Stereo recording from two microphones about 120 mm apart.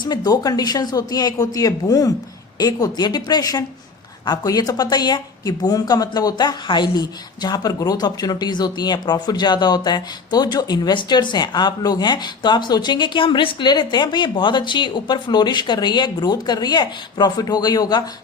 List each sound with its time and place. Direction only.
0.0 s a woman's voice: 35° left (ahead or behind)